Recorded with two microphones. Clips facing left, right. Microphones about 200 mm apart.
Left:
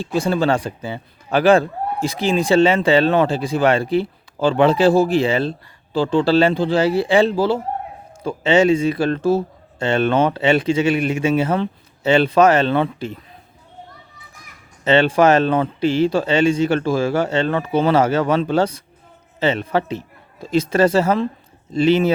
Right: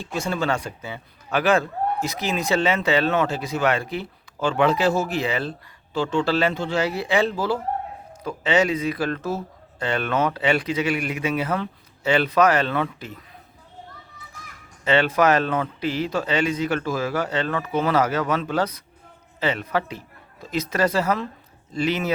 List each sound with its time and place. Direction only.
0.0 s speech: 35° left (ahead or behind)
14.8 s a man's voice: 30° left (ahead or behind)